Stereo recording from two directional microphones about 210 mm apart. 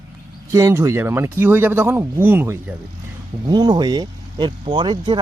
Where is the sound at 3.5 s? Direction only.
20° right (ahead or behind).